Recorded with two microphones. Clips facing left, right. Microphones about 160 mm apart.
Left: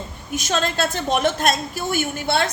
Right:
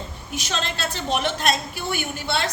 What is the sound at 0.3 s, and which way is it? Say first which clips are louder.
A woman's voice: left 6 dB; 45° left (ahead or behind).